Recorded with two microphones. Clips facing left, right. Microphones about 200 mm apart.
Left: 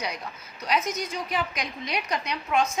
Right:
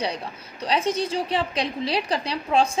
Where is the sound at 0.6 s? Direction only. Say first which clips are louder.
Right 4 dB; 30° right (ahead or behind).